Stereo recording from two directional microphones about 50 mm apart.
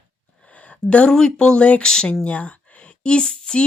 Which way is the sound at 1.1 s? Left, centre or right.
Centre.